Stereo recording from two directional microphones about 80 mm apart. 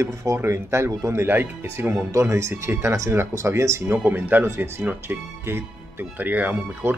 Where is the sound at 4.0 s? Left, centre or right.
Right.